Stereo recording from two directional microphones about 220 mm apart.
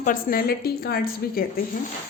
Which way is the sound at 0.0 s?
40° left (ahead or behind).